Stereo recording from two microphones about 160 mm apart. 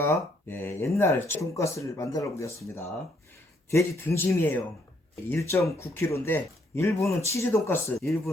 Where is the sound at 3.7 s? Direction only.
20° left (ahead or behind).